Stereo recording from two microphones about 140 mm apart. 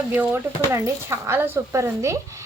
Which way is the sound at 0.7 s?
20° right (ahead or behind).